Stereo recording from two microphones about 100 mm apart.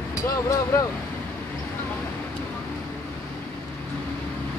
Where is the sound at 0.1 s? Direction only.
35° left (ahead or behind).